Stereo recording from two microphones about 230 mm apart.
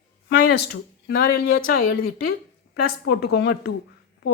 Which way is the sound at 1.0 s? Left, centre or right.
Left.